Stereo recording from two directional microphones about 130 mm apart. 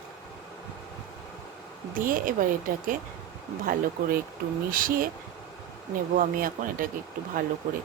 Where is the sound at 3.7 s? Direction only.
90° right.